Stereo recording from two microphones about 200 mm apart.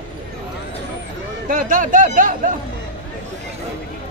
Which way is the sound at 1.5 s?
45° right (ahead or behind).